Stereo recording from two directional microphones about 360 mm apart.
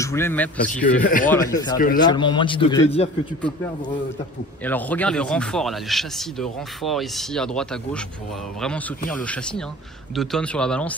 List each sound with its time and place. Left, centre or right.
0.0 s speech: centre
1.0 s speech: left
1.3 s a man's voice: centre
4.6 s speech: centre